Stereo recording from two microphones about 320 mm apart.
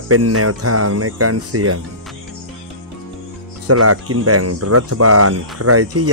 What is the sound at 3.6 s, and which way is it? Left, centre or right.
Speech, right.